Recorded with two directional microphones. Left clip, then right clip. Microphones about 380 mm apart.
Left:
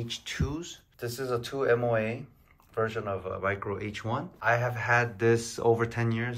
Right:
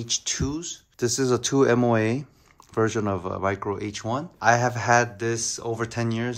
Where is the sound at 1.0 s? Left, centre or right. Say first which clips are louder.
Right 9 dB; centre.